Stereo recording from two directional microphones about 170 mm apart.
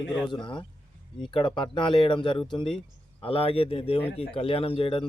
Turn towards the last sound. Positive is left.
turn(degrees=30)  # may be behind; listen again after turning